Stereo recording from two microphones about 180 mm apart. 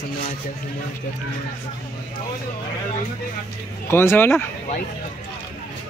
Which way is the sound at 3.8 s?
15° left (ahead or behind).